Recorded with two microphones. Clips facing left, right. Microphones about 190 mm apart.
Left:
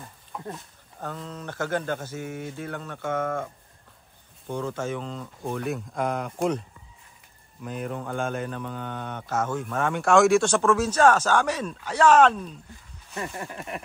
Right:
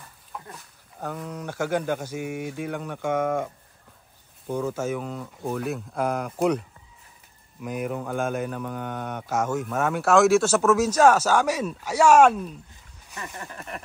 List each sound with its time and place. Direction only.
0.3 s dog: centre (ahead or behind)
0.9 s speech: 10° right (ahead or behind)
4.5 s speech: 5° right (ahead or behind)
7.6 s speech: 10° right (ahead or behind)
13.2 s speech: 15° left (ahead or behind)